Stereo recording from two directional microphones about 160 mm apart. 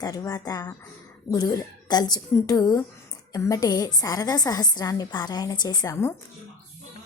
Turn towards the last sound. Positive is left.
turn(degrees=20)  # may be behind; listen again after turning